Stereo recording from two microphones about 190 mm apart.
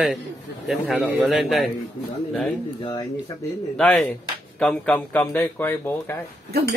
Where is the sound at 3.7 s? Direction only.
5° left (ahead or behind).